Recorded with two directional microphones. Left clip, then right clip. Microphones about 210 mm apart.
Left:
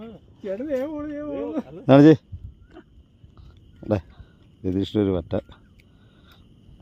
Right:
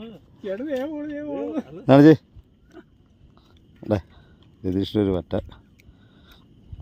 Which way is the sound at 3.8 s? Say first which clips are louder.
Even; centre (ahead or behind).